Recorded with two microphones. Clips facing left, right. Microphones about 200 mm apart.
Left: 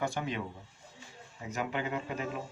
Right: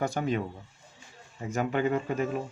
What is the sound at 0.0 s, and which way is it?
Speech, 40° right (ahead or behind).